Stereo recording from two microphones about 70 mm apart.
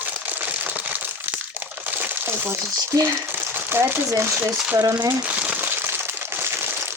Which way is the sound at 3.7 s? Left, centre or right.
Right.